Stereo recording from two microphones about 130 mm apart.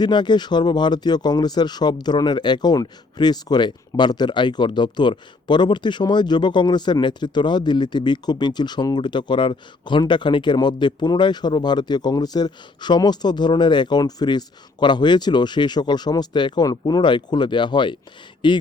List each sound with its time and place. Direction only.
0.0 s speech: 35° left (ahead or behind)